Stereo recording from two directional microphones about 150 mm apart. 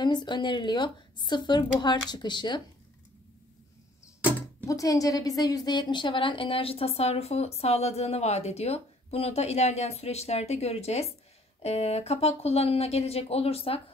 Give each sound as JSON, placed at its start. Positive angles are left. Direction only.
{"t": 0.0, "sound": "speech", "side_deg": 30}
{"t": 4.6, "sound": "a woman's voice", "side_deg": 20}